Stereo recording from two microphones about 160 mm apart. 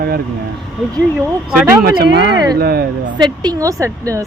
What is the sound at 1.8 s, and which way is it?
Speech, 70° right (ahead or behind).